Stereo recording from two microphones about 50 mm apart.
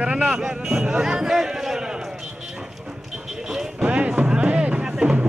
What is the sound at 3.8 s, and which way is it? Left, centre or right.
Music, right.